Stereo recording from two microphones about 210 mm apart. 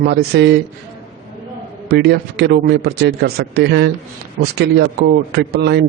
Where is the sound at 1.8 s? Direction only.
50° right (ahead or behind).